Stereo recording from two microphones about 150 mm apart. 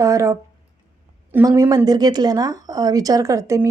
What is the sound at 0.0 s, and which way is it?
Speech, 20° right (ahead or behind).